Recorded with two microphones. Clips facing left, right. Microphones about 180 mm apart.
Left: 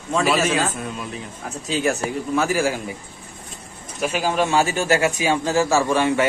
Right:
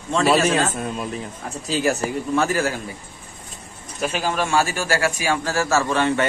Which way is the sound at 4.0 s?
10° left (ahead or behind).